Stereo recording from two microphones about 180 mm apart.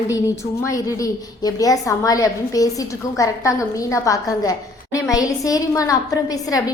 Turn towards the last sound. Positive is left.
turn(degrees=20)  # may be behind; listen again after turning